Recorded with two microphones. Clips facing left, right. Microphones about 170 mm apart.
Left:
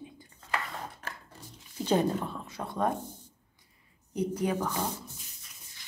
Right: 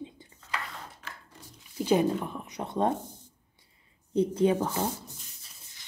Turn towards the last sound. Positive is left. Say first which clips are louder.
# right 5 dB
turn(degrees=-25)  # may be behind; listen again after turning